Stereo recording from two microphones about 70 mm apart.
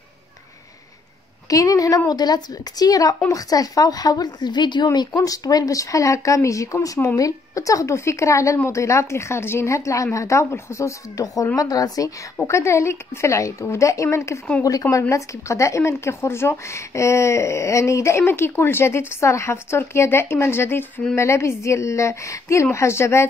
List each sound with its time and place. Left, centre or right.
1.5 s speech: left
2.0 s speech: left
4.9 s a woman's voice: left
11.5 s speech: left
12.4 s a woman's voice: left